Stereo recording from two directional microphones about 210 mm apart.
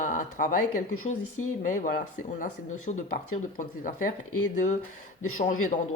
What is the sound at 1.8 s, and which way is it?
Speech, 40° left (ahead or behind).